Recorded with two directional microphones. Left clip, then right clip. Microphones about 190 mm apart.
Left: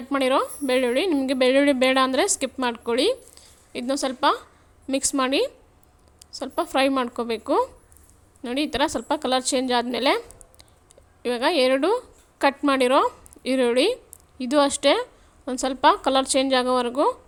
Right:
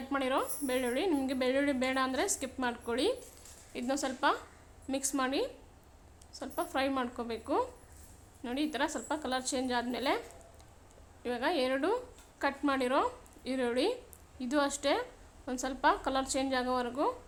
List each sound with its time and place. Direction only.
0.1 s a woman's voice: 35° left (ahead or behind)
11.2 s a woman's voice: 35° left (ahead or behind)